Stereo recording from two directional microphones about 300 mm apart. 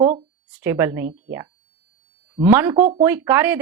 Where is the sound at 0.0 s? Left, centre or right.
Right.